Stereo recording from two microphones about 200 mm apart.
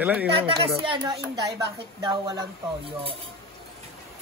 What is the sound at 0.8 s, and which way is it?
Speech, 20° right (ahead or behind).